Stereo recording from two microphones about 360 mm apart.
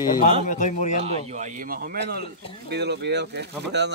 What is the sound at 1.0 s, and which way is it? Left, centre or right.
Speech, centre.